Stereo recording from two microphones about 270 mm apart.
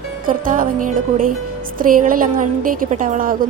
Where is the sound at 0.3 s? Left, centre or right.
Right.